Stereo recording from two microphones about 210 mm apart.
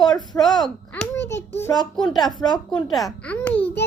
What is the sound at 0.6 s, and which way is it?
A child's voice, 5° left (ahead or behind).